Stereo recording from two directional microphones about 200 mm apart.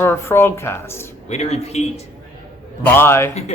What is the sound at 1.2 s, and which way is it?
Speech, 35° left (ahead or behind).